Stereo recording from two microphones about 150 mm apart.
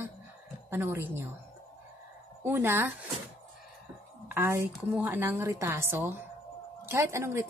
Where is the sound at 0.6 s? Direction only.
15° right (ahead or behind).